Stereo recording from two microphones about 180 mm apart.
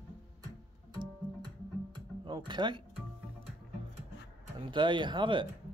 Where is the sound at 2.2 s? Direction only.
25° right (ahead or behind).